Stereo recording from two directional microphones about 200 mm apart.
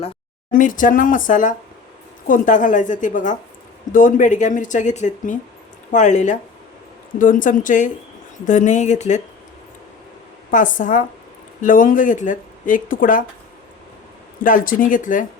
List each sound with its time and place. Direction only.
0.5 s speech: 40° left (ahead or behind)
10.5 s speech: 40° left (ahead or behind)
14.4 s speech: 45° left (ahead or behind)